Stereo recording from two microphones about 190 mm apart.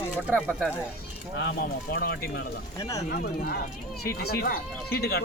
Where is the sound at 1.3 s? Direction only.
60° left (ahead or behind).